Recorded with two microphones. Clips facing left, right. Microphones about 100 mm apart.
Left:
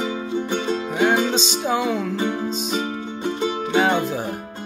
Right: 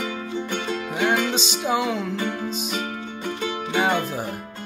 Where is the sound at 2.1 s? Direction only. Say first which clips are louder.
Left 3 dB; 25° left (ahead or behind).